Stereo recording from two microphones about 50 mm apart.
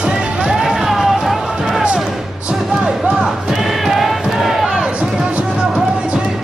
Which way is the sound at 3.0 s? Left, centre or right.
Centre.